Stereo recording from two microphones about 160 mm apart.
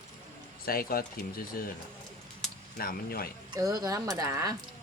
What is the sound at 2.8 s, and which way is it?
Speech, 70° left (ahead or behind).